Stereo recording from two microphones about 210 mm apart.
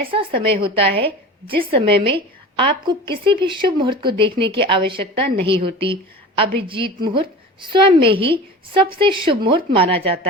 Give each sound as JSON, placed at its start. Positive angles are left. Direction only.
{"t": 0.1, "sound": "a woman's voice", "side_deg": -25}